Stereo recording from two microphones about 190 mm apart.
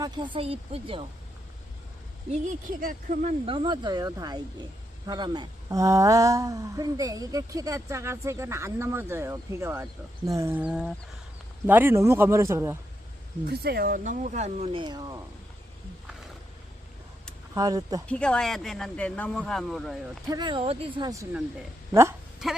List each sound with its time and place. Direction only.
0.0 s speech: 25° right (ahead or behind)
2.3 s speech: 40° right (ahead or behind); by 12.7 s 15° right (ahead or behind)
13.5 s speech: 55° right (ahead or behind); by 15.2 s 20° right (ahead or behind)
17.5 s speech: 20° right (ahead or behind)
18.1 s speech: 5° left (ahead or behind)
20.2 s speech: 20° right (ahead or behind)
22.4 s speech: centre (ahead or behind)